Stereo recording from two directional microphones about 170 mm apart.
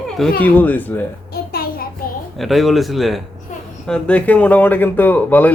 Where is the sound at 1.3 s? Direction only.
60° left (ahead or behind).